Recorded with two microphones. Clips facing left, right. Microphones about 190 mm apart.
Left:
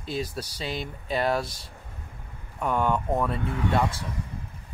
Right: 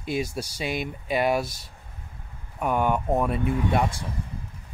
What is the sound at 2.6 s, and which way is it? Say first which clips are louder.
Speech: right 1 dB; 10° right (ahead or behind).